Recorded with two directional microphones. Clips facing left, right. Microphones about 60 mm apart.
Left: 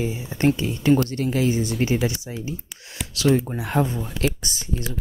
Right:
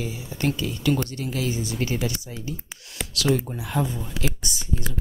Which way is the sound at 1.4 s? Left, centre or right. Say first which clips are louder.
Left 5 dB; left.